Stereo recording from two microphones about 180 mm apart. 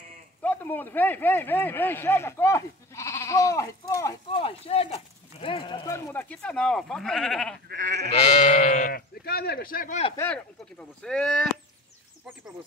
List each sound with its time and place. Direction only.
0.4 s speech: 10° left (ahead or behind)
4.3 s speech: 30° left (ahead or behind)
5.9 s speech: 15° left (ahead or behind)
7.6 s sheep: 45° right (ahead or behind)
8.1 s speech: 35° left (ahead or behind)
10.1 s speech: 10° left (ahead or behind)